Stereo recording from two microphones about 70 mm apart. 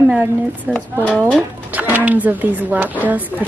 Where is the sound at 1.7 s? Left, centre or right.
Right.